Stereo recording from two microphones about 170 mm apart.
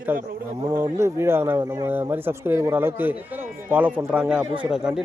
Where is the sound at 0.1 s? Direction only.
10° right (ahead or behind).